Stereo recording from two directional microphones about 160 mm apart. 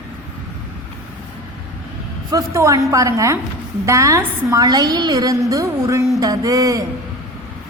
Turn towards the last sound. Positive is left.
turn(degrees=-20)  # may be behind; listen again after turning